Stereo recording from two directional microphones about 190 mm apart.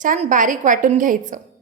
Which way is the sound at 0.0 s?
40° right (ahead or behind).